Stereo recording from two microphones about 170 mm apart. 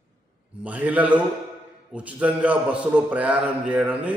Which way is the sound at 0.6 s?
10° right (ahead or behind).